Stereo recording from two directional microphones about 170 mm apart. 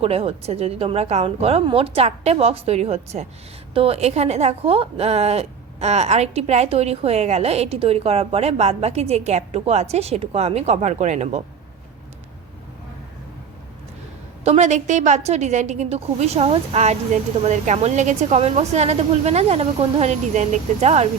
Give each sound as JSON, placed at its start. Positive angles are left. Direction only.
{"t": 0.0, "sound": "a woman's voice", "side_deg": -35}
{"t": 14.4, "sound": "a woman's voice", "side_deg": -40}